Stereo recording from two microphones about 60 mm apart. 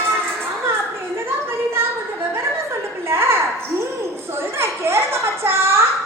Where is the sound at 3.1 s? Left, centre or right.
Right.